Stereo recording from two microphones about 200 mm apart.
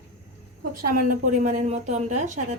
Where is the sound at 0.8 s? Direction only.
40° right (ahead or behind).